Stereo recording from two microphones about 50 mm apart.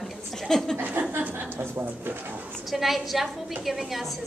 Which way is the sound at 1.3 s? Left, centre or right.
Right.